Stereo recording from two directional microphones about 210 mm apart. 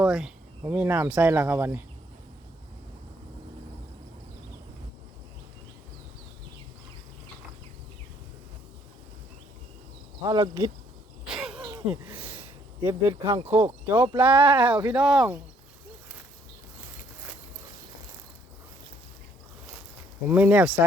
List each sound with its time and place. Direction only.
0.0 s speech: 5° right (ahead or behind)
10.2 s speech: 20° right (ahead or behind)
11.3 s a sound: centre (ahead or behind)
11.6 s a sound: 15° right (ahead or behind)
13.1 s speech: 20° right (ahead or behind)
13.8 s speech: 10° right (ahead or behind)
20.2 s speech: 5° right (ahead or behind)